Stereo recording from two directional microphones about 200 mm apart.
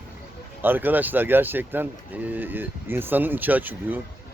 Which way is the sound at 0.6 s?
10° right (ahead or behind).